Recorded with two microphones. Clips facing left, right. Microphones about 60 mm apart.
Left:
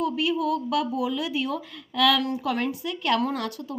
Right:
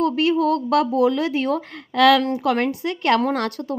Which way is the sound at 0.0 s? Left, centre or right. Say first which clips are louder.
Right 6 dB; right.